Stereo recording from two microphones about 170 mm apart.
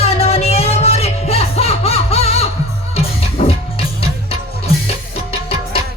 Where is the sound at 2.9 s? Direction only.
35° left (ahead or behind).